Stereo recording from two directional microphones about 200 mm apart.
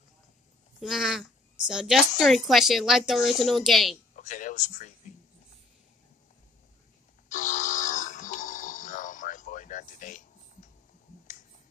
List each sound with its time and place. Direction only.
0.7 s a woman's voice: centre (ahead or behind)
4.1 s speech: 40° left (ahead or behind)
7.2 s music: 40° left (ahead or behind)